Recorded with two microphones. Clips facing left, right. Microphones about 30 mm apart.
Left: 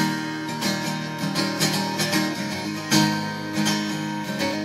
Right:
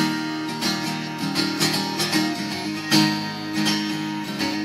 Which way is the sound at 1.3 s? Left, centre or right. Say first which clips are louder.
Right 1 dB; right.